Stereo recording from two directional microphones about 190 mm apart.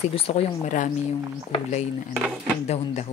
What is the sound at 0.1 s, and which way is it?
Speech, 30° left (ahead or behind).